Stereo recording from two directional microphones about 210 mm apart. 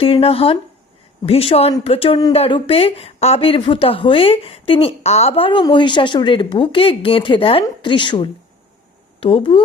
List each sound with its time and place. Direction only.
0.0 s speech: 25° left (ahead or behind)